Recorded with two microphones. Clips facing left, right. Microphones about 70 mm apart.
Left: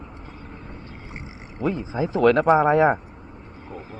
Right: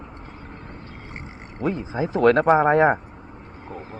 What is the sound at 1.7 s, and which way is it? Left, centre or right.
Speech, right.